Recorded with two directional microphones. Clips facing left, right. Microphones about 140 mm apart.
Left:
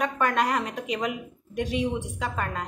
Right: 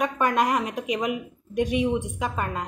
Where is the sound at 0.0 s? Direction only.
15° right (ahead or behind).